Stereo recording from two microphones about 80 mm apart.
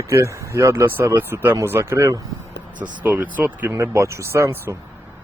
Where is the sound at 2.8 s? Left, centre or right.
Centre.